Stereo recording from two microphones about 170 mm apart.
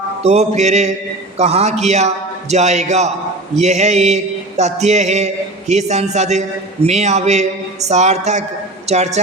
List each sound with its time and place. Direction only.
0.2 s a man's voice: 40° right (ahead or behind)